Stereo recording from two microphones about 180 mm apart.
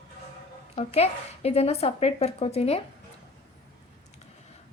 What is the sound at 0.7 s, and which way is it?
A woman's voice, 35° left (ahead or behind).